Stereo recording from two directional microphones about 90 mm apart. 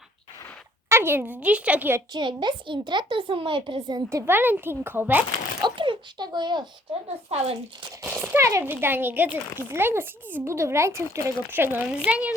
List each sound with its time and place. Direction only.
0.9 s speech: 25° right (ahead or behind)
2.1 s a child's voice: 60° right (ahead or behind)
4.1 s speech: 25° right (ahead or behind)
5.6 s speech: 65° right (ahead or behind)
8.0 s a sound: 20° right (ahead or behind)
8.7 s a woman's voice: 25° right (ahead or behind)